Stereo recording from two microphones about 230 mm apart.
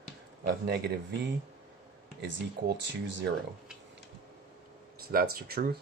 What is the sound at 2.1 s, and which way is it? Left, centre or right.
Speech, right.